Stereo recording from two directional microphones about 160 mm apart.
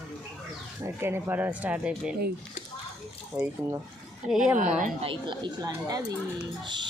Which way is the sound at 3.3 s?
15° right (ahead or behind).